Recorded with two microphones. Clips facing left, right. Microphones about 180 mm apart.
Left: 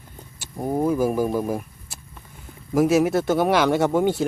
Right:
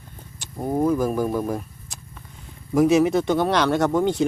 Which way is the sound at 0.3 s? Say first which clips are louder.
Right 1 dB; 5° left (ahead or behind).